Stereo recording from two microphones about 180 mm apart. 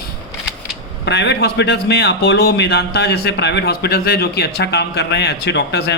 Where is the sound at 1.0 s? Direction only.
70° left (ahead or behind).